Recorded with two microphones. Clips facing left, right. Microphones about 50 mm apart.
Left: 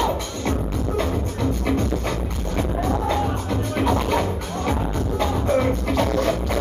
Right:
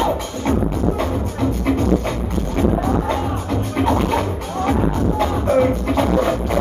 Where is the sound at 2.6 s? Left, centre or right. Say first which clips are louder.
Right 5 dB; centre.